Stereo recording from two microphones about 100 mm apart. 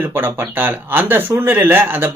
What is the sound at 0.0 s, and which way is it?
Speech, 20° right (ahead or behind).